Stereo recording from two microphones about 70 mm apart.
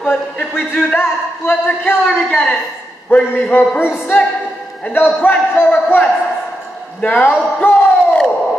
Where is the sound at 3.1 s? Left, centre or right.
Left.